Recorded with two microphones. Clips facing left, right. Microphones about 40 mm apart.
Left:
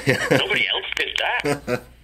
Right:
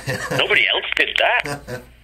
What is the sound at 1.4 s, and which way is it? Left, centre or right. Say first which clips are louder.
Speech: left 6 dB; left.